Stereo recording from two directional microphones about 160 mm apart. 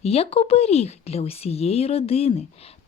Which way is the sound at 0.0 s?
40° left (ahead or behind).